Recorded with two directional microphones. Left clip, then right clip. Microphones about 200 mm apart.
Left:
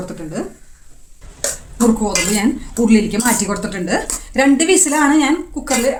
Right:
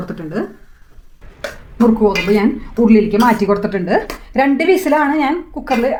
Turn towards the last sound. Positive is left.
turn(degrees=-20)  # may be behind; listen again after turning